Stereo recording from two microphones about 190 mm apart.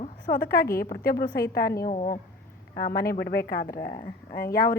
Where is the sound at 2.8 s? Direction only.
55° left (ahead or behind).